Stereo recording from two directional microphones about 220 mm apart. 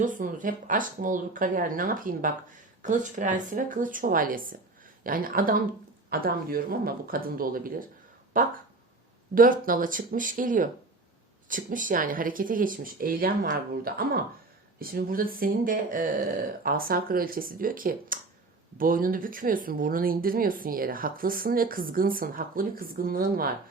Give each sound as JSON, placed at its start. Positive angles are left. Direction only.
{"t": 0.0, "sound": "speech", "side_deg": -40}